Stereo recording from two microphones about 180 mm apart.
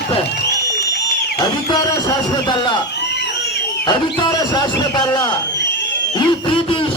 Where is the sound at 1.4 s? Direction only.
20° left (ahead or behind).